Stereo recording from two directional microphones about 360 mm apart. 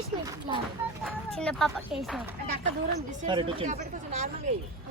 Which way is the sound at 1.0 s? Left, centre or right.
Centre.